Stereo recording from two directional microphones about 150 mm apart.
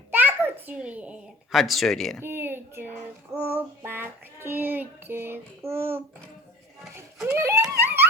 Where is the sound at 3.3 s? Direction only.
15° right (ahead or behind).